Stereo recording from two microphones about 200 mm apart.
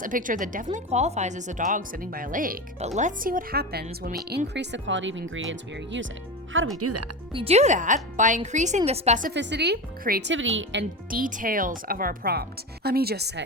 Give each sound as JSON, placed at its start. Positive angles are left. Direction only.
{"t": 0.0, "sound": "a woman's voice", "side_deg": -40}
{"t": 7.3, "sound": "a woman's voice", "side_deg": -30}
{"t": 9.3, "sound": "speech", "side_deg": -60}
{"t": 10.3, "sound": "speech", "side_deg": -70}
{"t": 11.1, "sound": "speech", "side_deg": -45}